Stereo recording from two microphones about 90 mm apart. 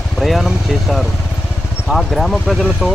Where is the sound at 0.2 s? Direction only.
Centre (ahead or behind).